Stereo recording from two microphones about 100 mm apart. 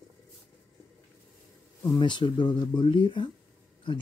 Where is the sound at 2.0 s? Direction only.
50° left (ahead or behind).